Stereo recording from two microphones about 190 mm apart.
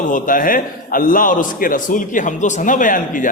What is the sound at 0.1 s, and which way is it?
A man's voice, 45° left (ahead or behind).